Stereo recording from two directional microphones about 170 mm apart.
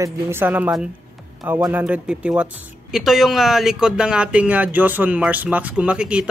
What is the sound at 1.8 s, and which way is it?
Speech, 5° right (ahead or behind).